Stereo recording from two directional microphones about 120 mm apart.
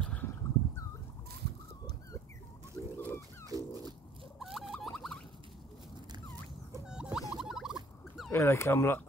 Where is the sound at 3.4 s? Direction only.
30° right (ahead or behind).